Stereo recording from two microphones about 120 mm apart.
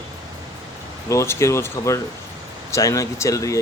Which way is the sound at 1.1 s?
25° left (ahead or behind).